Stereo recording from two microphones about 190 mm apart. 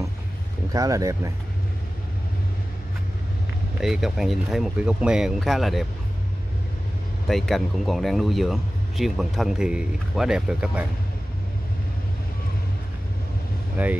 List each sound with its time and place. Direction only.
0.7 s speech: 15° right (ahead or behind)
3.8 s speech: centre (ahead or behind)
7.2 s speech: centre (ahead or behind)
13.8 s speech: 10° right (ahead or behind)